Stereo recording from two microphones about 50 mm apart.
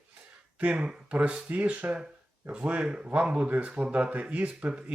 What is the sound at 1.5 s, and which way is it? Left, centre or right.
Speech, right.